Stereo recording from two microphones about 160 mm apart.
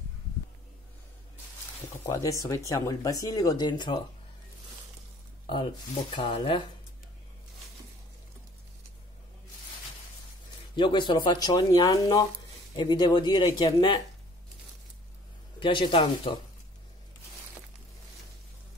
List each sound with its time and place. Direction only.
2.0 s speech: 20° left (ahead or behind)
5.5 s speech: 30° left (ahead or behind)
10.8 s speech: 30° left (ahead or behind)
15.6 s speech: 30° left (ahead or behind)